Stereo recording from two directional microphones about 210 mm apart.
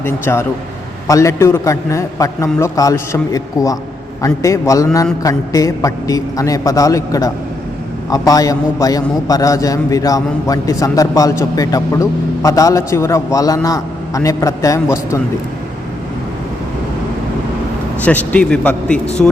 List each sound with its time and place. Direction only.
0.0 s a man's voice: 10° left (ahead or behind)
18.0 s a man's voice: 5° left (ahead or behind)